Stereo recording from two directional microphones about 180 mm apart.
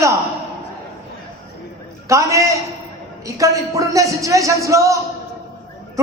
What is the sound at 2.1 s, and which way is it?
A man's voice, 15° right (ahead or behind).